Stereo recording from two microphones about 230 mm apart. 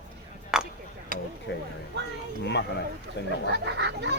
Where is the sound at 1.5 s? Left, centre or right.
Left.